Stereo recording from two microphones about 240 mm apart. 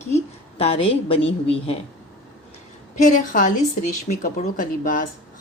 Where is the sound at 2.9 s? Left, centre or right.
Left.